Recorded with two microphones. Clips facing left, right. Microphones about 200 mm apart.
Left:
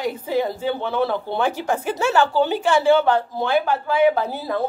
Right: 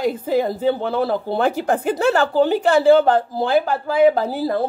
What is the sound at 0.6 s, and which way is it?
Speech, 40° right (ahead or behind).